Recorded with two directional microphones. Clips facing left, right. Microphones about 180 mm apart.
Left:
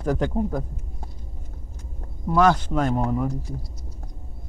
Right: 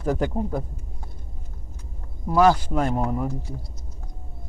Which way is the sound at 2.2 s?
5° right (ahead or behind).